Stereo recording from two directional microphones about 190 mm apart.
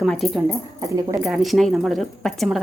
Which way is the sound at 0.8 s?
20° right (ahead or behind).